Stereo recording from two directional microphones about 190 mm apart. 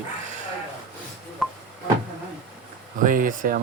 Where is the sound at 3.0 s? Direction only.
45° right (ahead or behind).